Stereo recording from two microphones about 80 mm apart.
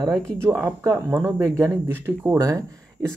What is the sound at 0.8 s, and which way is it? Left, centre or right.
Speech, right.